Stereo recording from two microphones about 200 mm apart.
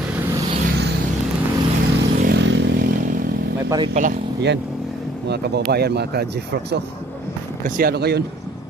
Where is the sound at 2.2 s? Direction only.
60° right (ahead or behind).